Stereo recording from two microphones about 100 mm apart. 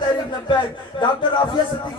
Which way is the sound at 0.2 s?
55° left (ahead or behind).